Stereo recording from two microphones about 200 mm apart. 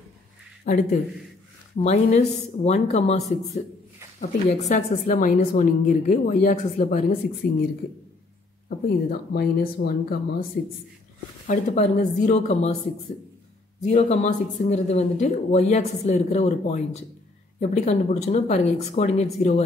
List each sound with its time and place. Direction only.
0.7 s speech: 40° left (ahead or behind)
8.6 s speech: 50° left (ahead or behind)
11.4 s speech: 35° left (ahead or behind)
13.8 s speech: 35° left (ahead or behind)